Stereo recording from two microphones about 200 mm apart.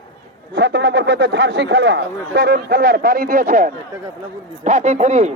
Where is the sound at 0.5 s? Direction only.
60° right (ahead or behind).